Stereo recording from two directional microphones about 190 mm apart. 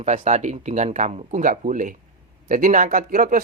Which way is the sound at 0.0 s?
35° right (ahead or behind).